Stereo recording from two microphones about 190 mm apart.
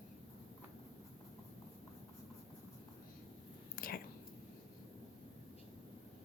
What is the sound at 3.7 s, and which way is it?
Whispering, 50° left (ahead or behind).